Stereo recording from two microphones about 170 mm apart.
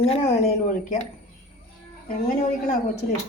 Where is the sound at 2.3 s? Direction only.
45° left (ahead or behind).